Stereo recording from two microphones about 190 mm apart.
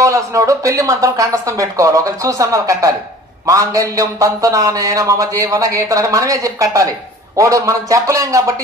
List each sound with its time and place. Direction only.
0.0 s speech: 15° right (ahead or behind)